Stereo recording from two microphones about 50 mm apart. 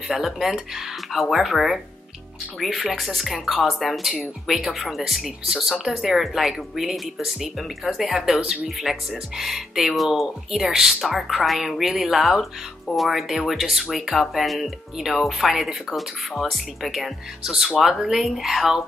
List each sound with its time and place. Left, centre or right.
0.1 s speech: centre
4.1 s speech: centre
4.7 s speech: centre